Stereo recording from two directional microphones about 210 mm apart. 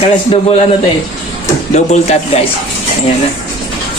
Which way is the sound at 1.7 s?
30° left (ahead or behind).